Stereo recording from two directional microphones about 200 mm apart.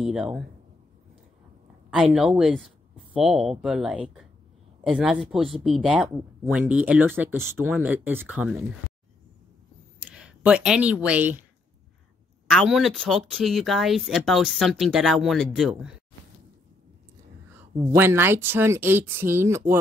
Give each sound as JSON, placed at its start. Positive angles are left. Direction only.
{"t": 0.0, "sound": "speech", "side_deg": -5}
{"t": 1.9, "sound": "speech", "side_deg": 0}
{"t": 9.9, "sound": "speech", "side_deg": -5}
{"t": 12.4, "sound": "speech", "side_deg": 0}
{"t": 17.6, "sound": "speech", "side_deg": -10}